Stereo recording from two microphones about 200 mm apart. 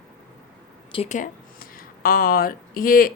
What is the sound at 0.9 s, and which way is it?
Speech, 35° left (ahead or behind).